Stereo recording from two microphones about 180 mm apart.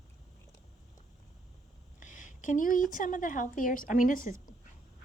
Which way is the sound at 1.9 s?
45° left (ahead or behind).